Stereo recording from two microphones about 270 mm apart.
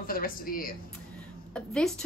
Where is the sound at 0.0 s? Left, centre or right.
Left.